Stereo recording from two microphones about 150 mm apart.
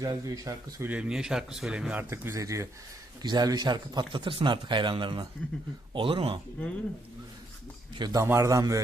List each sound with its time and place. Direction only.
0.0 s a man's voice: 25° right (ahead or behind)
0.9 s a man's voice: 5° right (ahead or behind); by 6.4 s 35° right (ahead or behind)
7.9 s a man's voice: 25° right (ahead or behind)